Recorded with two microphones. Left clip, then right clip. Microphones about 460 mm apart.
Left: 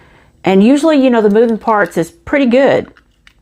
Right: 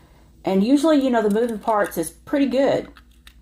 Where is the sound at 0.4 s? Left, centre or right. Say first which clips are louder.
Left 8 dB; left.